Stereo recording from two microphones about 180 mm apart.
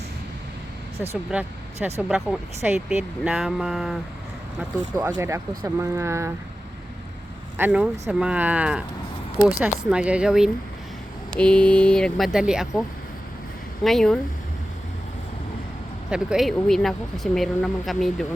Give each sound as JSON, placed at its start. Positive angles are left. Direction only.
{"t": 0.9, "sound": "speech", "side_deg": -35}
{"t": 1.3, "sound": "speech", "side_deg": -5}
{"t": 5.1, "sound": "speech", "side_deg": -15}
{"t": 7.6, "sound": "speech", "side_deg": -10}
{"t": 13.8, "sound": "speech", "side_deg": 0}
{"t": 16.0, "sound": "speech", "side_deg": -5}